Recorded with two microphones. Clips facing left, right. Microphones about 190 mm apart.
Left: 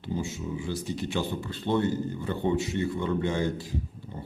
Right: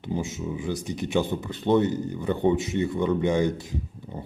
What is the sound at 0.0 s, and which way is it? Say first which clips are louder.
Speech: right 3 dB; 20° right (ahead or behind).